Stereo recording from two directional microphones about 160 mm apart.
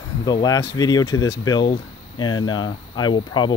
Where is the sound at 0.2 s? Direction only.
25° left (ahead or behind).